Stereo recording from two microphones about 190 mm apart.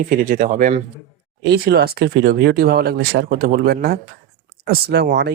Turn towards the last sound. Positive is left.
turn(degrees=-55)  # may be behind; listen again after turning